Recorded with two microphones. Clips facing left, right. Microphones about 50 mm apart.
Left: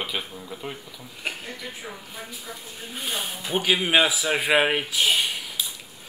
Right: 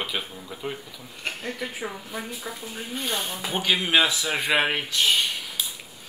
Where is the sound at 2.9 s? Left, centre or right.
Centre.